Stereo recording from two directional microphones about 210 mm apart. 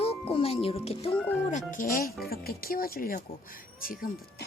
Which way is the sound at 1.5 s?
35° left (ahead or behind).